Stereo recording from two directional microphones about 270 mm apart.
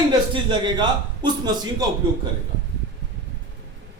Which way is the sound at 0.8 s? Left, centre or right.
Centre.